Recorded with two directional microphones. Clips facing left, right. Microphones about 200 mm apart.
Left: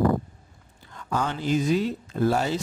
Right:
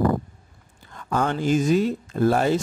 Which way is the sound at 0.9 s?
55° right (ahead or behind).